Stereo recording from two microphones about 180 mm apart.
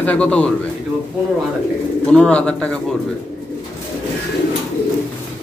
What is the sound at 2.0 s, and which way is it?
Speech, 5° left (ahead or behind).